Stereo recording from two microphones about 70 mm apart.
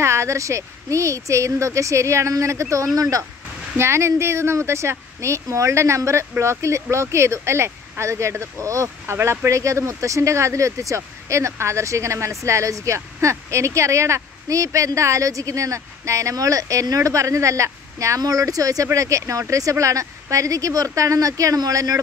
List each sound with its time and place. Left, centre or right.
0.0 s speech: right
3.7 s speech: right